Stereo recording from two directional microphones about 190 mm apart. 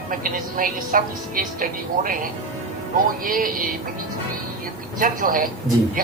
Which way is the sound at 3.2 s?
45° right (ahead or behind).